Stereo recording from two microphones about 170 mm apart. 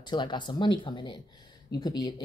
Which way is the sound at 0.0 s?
25° left (ahead or behind).